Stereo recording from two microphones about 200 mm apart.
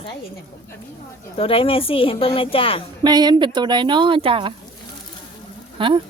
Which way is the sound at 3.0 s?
20° right (ahead or behind).